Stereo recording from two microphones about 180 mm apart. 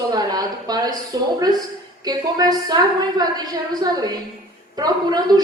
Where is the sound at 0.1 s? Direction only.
20° right (ahead or behind).